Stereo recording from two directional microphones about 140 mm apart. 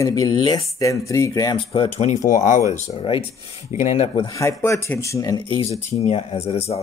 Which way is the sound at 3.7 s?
50° left (ahead or behind).